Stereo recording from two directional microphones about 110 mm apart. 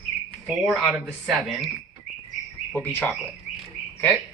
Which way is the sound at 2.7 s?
20° left (ahead or behind).